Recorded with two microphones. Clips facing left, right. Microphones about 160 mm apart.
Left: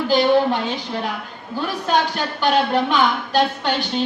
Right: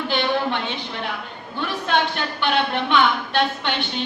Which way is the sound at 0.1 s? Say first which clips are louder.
Left 7 dB; 40° left (ahead or behind).